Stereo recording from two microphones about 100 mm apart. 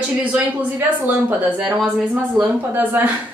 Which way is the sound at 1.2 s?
15° right (ahead or behind).